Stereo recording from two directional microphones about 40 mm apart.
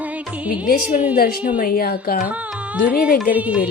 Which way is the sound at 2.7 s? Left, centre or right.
Right.